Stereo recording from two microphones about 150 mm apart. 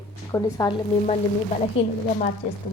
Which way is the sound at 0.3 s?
20° left (ahead or behind).